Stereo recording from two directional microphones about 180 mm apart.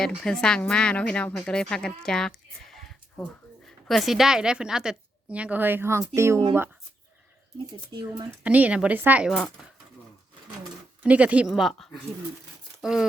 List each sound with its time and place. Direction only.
0.0 s a woman's voice: 5° left (ahead or behind); by 6.4 s 15° right (ahead or behind)
7.9 s speech: 20° right (ahead or behind)
8.4 s a woman's voice: 5° right (ahead or behind)
11.0 s a woman's voice: 5° right (ahead or behind)